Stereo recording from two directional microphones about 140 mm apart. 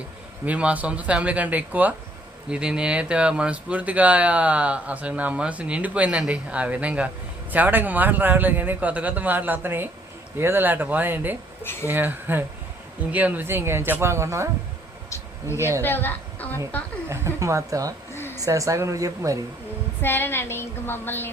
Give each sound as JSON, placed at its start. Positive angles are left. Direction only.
{"t": 0.4, "sound": "speech", "side_deg": -10}
{"t": 11.6, "sound": "speech", "side_deg": 15}
{"t": 11.9, "sound": "speech", "side_deg": -15}
{"t": 15.5, "sound": "speech", "side_deg": -20}
{"t": 15.8, "sound": "a woman's voice", "side_deg": 15}
{"t": 17.1, "sound": "a woman's voice", "side_deg": -20}
{"t": 18.1, "sound": "a sound", "side_deg": 15}
{"t": 18.3, "sound": "a woman's voice", "side_deg": -25}
{"t": 20.0, "sound": "a woman's voice", "side_deg": 15}